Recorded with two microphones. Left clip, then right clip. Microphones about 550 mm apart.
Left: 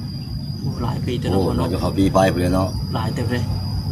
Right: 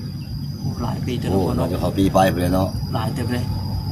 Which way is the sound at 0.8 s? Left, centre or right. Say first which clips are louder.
Left 1 dB; right.